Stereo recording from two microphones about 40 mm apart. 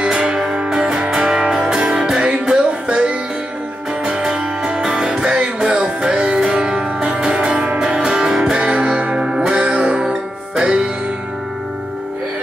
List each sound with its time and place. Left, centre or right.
0.0 s music: right